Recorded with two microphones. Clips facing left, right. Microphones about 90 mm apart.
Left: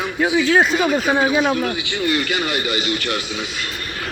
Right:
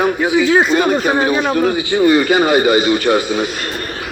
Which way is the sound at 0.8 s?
55° right (ahead or behind).